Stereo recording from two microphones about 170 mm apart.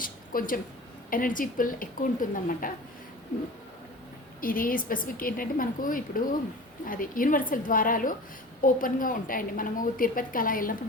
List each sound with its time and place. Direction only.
0.0 s a sound: 55° left (ahead or behind)
1.1 s speech: 55° left (ahead or behind)
4.4 s a woman's voice: 55° left (ahead or behind)